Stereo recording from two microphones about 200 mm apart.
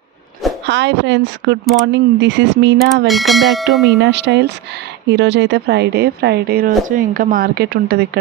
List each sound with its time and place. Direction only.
0.7 s speech: 60° right (ahead or behind)
3.1 s speech: centre (ahead or behind)
4.0 s a woman's voice: 60° right (ahead or behind)